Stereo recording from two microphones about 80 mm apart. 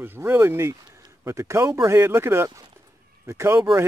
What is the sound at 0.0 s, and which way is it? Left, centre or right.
A man's voice, right.